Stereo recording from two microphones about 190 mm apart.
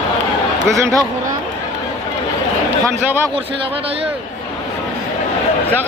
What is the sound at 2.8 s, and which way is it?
Speech, 15° right (ahead or behind).